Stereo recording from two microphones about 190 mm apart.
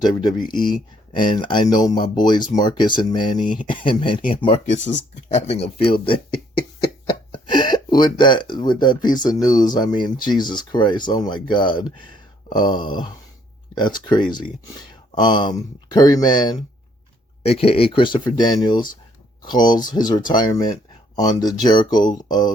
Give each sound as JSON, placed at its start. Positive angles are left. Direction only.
{"t": 0.0, "sound": "speech", "side_deg": 20}
{"t": 7.1, "sound": "a sound", "side_deg": 25}
{"t": 8.2, "sound": "speech", "side_deg": 25}